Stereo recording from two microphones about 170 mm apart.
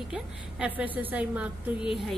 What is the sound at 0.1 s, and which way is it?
A woman's voice, 5° right (ahead or behind).